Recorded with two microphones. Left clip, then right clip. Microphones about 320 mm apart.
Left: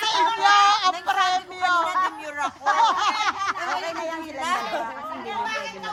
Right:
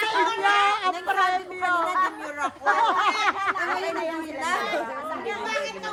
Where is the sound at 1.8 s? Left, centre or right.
Left.